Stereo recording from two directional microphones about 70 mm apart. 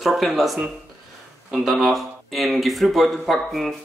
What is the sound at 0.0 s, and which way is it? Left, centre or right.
A man's voice, centre.